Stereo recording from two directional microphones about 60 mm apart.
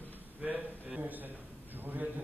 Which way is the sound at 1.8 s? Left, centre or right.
Right.